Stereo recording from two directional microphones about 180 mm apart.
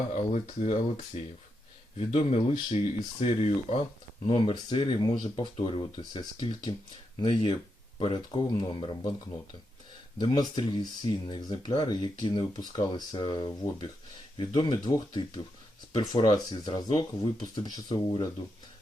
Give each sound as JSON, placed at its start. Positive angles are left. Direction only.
{"t": 0.6, "sound": "speech", "side_deg": 35}
{"t": 10.2, "sound": "speech", "side_deg": 25}